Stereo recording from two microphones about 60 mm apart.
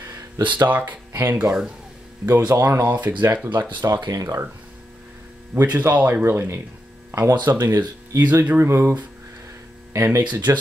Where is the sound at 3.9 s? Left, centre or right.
Right.